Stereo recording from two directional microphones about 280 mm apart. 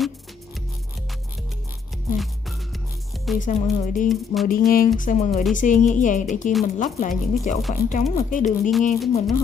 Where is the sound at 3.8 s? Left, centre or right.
Left.